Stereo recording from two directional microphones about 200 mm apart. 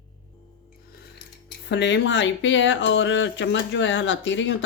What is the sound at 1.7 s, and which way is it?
Speech, 60° left (ahead or behind).